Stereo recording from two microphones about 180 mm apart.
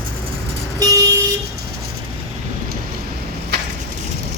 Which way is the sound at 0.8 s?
20° right (ahead or behind).